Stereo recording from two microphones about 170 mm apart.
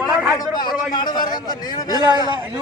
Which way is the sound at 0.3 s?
25° left (ahead or behind).